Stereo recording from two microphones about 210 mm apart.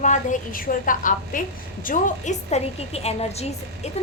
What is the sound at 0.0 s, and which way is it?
A woman's voice, 35° left (ahead or behind).